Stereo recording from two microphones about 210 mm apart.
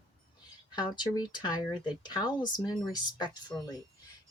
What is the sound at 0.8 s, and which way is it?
Speech, 20° left (ahead or behind).